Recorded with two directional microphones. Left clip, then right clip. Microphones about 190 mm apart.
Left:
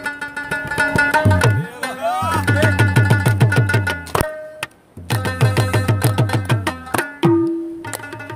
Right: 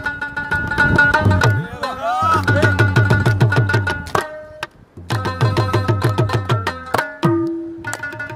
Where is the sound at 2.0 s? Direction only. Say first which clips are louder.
Right 3 dB; 10° right (ahead or behind).